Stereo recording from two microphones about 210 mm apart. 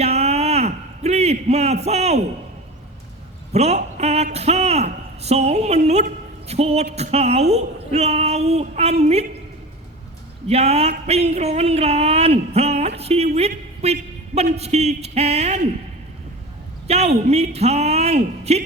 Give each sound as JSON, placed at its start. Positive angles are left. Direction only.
{"t": 0.0, "sound": "a sound", "side_deg": -30}
{"t": 3.5, "sound": "speech", "side_deg": -30}
{"t": 10.5, "sound": "speech", "side_deg": -30}
{"t": 13.0, "sound": "a sound", "side_deg": -30}
{"t": 14.5, "sound": "speech", "side_deg": -30}
{"t": 16.8, "sound": "a woman's voice", "side_deg": -30}